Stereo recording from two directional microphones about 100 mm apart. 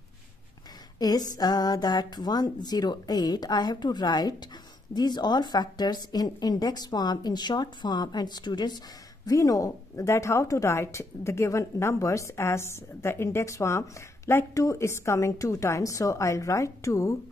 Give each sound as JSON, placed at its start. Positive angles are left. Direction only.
{"t": 0.9, "sound": "a woman's voice", "side_deg": 40}
{"t": 9.2, "sound": "a woman's voice", "side_deg": 35}